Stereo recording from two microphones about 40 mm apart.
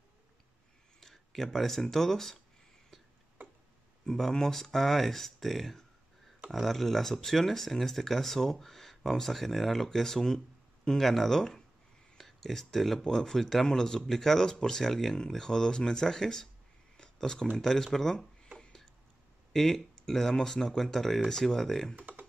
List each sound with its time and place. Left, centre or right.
1.0 s speech: centre
4.0 s speech: centre
16.9 s a sound: centre
17.6 s speech: centre
19.5 s speech: centre
21.9 s a sound: right